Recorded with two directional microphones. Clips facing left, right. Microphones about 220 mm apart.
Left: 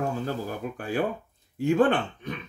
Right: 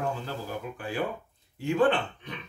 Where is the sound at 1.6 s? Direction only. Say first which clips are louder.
Left 3 dB; 45° left (ahead or behind).